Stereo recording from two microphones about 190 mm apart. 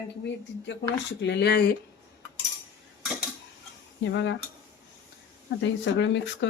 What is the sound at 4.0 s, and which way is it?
Speech, 70° left (ahead or behind).